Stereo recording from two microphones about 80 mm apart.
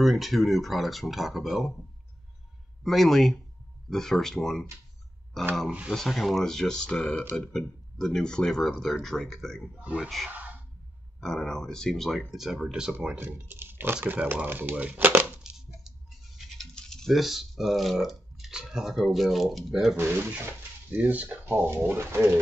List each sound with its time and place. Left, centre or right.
0.0 s speech: centre
2.8 s speech: centre
5.7 s speech: centre
5.9 s speech: centre
9.8 s speech: centre
10.0 s speech: centre
13.0 s speech: right
16.5 s speech: centre
20.0 s speech: right